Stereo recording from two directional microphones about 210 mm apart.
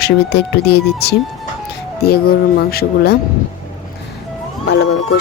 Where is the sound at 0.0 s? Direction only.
50° left (ahead or behind).